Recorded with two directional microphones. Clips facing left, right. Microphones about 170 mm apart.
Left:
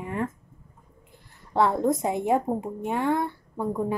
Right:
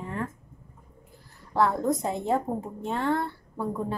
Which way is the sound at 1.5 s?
25° left (ahead or behind).